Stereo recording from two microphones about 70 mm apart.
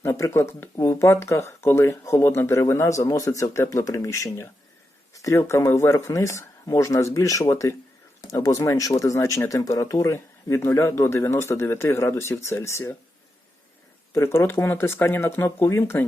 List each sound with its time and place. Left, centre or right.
0.0 s speech: left
5.1 s a sound: left
5.5 s speech: left
14.1 s speech: left